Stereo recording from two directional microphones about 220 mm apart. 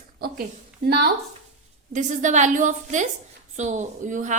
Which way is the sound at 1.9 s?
35° right (ahead or behind).